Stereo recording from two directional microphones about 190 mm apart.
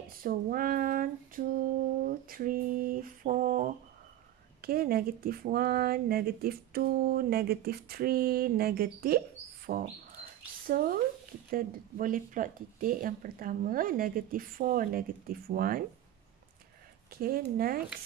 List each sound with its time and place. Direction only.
0.1 s speech: 50° right (ahead or behind)
17.1 s speech: 50° right (ahead or behind)